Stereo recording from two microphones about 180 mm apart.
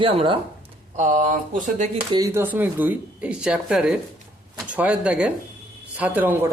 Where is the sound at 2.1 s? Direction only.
15° right (ahead or behind).